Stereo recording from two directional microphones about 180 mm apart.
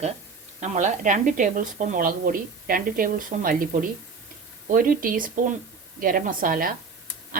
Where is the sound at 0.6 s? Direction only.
40° right (ahead or behind).